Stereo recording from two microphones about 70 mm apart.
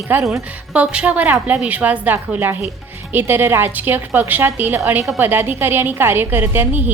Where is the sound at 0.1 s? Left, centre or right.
Right.